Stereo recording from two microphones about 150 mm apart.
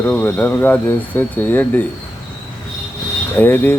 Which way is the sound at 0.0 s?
10° left (ahead or behind).